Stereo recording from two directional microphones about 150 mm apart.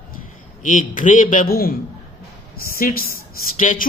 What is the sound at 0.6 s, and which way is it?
Speech, 60° left (ahead or behind).